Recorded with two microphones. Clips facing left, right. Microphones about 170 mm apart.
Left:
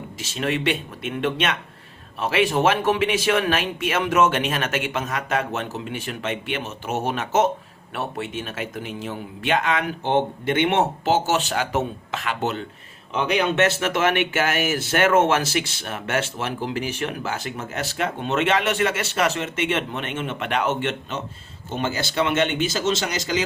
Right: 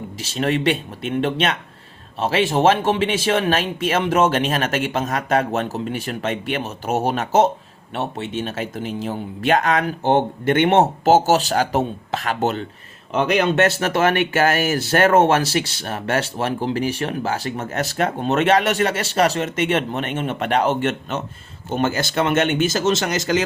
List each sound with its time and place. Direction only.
0.2 s speech: 35° right (ahead or behind); by 23.4 s 50° right (ahead or behind)